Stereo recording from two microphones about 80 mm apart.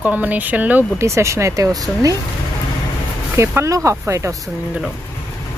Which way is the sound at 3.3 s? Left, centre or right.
Right.